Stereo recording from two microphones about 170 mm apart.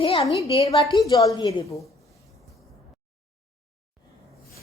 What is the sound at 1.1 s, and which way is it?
Speech, 20° left (ahead or behind).